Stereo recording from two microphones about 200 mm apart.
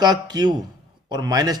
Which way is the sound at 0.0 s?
20° right (ahead or behind).